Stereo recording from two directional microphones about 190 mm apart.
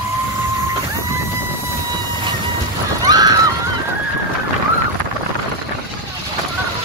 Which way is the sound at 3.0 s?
20° right (ahead or behind).